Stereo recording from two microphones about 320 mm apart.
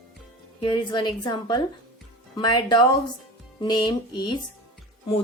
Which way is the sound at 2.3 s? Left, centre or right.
Centre.